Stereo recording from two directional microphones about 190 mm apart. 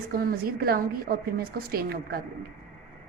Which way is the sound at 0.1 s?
50° right (ahead or behind).